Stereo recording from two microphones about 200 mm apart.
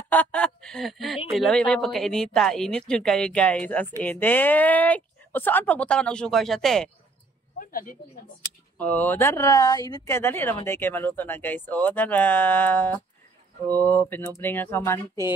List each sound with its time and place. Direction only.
0.1 s speech: 5° left (ahead or behind)
7.5 s speech: 45° left (ahead or behind)
8.7 s speech: 10° left (ahead or behind)